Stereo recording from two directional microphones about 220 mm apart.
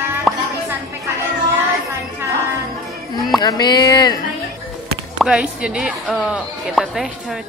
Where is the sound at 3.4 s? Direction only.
20° left (ahead or behind).